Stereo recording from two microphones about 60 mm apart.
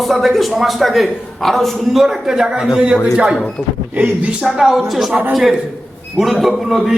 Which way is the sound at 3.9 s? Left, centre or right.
Right.